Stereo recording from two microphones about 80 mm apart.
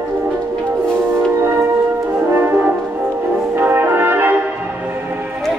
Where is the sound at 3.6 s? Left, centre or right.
Right.